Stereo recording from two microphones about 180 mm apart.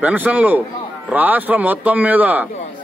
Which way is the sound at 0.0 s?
10° right (ahead or behind).